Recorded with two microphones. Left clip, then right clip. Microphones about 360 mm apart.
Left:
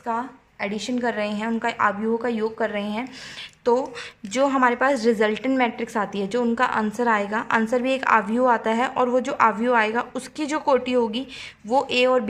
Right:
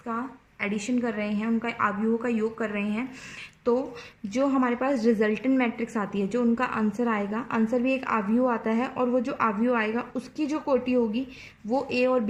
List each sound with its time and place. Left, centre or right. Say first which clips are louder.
0.6 s a woman's voice: left 3 dB; centre